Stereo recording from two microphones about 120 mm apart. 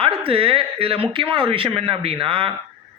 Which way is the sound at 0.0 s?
50° right (ahead or behind).